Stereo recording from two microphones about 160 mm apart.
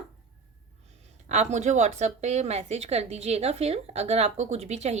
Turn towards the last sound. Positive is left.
turn(degrees=-45)  # may be behind; listen again after turning